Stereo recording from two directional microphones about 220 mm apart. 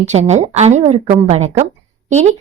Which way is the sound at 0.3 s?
30° right (ahead or behind).